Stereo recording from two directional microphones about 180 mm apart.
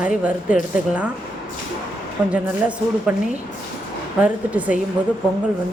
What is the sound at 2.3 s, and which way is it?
Speech, 5° right (ahead or behind).